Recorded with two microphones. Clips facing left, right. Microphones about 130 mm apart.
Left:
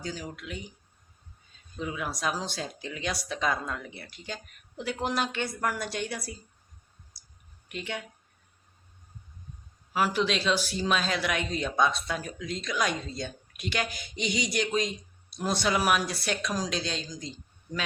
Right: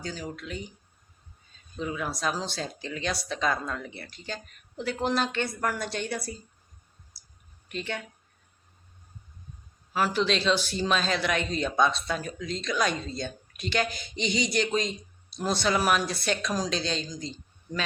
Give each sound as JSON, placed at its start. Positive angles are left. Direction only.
{"t": 0.0, "sound": "speech", "side_deg": 10}
{"t": 1.8, "sound": "speech", "side_deg": 10}
{"t": 7.1, "sound": "clicking", "side_deg": 15}
{"t": 7.7, "sound": "speech", "side_deg": 10}
{"t": 9.9, "sound": "speech", "side_deg": 10}